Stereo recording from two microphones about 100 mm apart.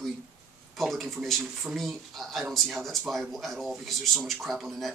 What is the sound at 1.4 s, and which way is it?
Speech, 10° right (ahead or behind).